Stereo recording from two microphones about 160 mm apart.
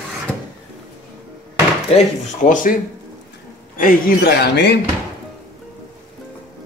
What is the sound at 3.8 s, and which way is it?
Speech, 70° left (ahead or behind).